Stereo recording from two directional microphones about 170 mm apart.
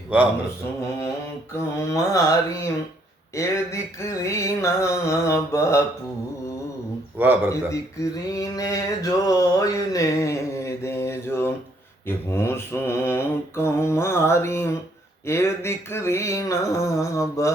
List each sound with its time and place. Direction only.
0.1 s a man's voice: 10° right (ahead or behind)
1.9 s mantra: 20° left (ahead or behind)
7.2 s a man's voice: 10° right (ahead or behind)
8.3 s a sound: 20° left (ahead or behind)
12.0 s mantra: 15° left (ahead or behind)